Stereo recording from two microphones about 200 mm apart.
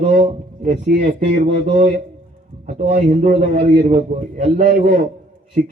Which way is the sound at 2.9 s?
40° right (ahead or behind).